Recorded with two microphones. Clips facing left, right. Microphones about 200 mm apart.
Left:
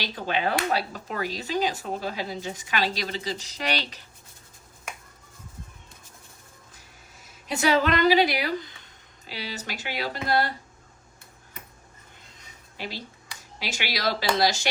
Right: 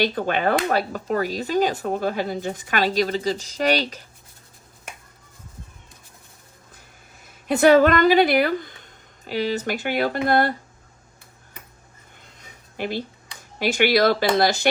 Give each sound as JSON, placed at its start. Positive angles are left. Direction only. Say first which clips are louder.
{"t": 0.1, "sound": "speech", "louder": "right 5 dB", "side_deg": -50}
{"t": 7.3, "sound": "speech", "louder": "right 9 dB", "side_deg": -55}
{"t": 12.7, "sound": "speech", "louder": "right 9 dB", "side_deg": -55}